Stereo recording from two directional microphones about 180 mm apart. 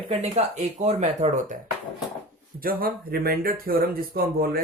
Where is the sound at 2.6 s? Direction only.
55° right (ahead or behind).